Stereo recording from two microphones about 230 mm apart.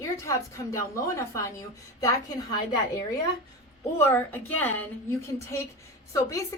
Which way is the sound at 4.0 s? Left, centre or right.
Centre.